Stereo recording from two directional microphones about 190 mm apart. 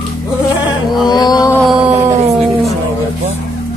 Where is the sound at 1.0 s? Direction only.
20° left (ahead or behind).